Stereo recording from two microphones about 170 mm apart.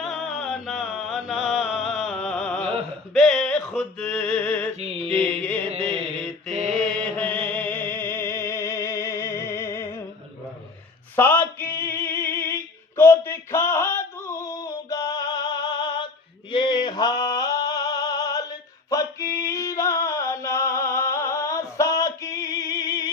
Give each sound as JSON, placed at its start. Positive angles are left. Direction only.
{"t": 0.0, "sound": "music", "side_deg": 0}
{"t": 3.2, "sound": "a sound", "side_deg": 5}
{"t": 4.8, "sound": "mantra", "side_deg": -35}
{"t": 5.1, "sound": "music", "side_deg": 10}
{"t": 6.5, "sound": "mantra", "side_deg": -40}
{"t": 6.7, "sound": "music", "side_deg": 5}
{"t": 11.2, "sound": "male singing", "side_deg": 10}
{"t": 16.5, "sound": "music", "side_deg": 30}
{"t": 18.9, "sound": "a sound", "side_deg": 20}